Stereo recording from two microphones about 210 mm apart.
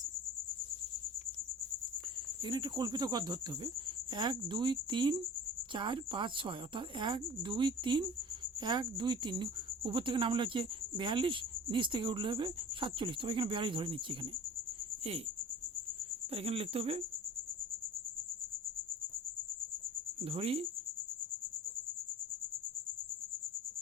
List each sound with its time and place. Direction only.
2.4 s speech: 20° right (ahead or behind)
16.3 s speech: 25° right (ahead or behind)
20.2 s speech: 25° right (ahead or behind)